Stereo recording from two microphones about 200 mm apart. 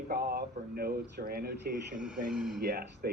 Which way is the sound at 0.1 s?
50° right (ahead or behind).